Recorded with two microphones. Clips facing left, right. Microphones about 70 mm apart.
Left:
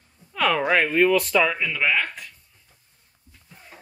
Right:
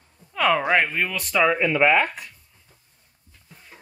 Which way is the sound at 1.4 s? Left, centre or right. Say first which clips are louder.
Right 4 dB; right.